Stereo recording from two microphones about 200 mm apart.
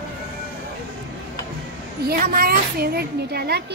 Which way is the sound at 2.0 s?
50° right (ahead or behind).